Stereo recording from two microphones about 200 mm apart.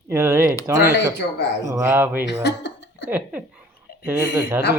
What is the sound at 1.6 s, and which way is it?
Speech, 15° right (ahead or behind).